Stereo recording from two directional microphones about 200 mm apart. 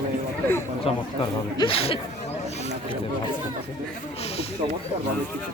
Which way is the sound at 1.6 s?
30° left (ahead or behind).